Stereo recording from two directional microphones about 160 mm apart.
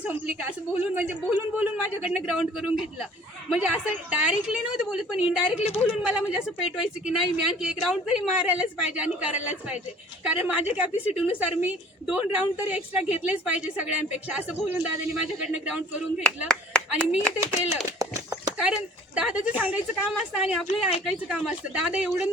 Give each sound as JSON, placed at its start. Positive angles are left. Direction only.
{"t": 0.0, "sound": "a woman's voice", "side_deg": -10}
{"t": 16.5, "sound": "speech", "side_deg": 5}
{"t": 18.0, "sound": "horse", "side_deg": -20}
{"t": 18.6, "sound": "a woman's voice", "side_deg": -5}